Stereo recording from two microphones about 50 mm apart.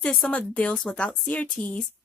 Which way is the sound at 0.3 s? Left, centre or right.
Left.